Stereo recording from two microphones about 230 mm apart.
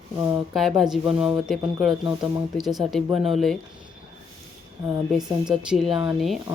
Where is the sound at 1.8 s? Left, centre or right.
Centre.